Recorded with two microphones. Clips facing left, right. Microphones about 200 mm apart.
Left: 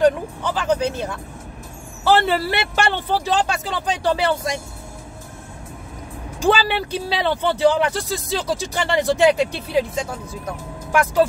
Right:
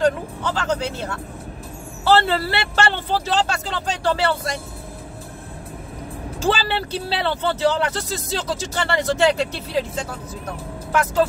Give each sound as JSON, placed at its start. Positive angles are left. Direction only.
{"t": 0.0, "sound": "speech", "side_deg": 15}
{"t": 6.4, "sound": "speech", "side_deg": 15}